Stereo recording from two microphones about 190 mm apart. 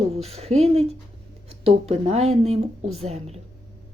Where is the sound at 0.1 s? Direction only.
35° right (ahead or behind).